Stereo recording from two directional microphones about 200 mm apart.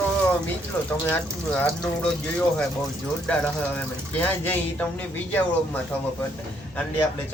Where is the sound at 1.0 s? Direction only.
10° left (ahead or behind).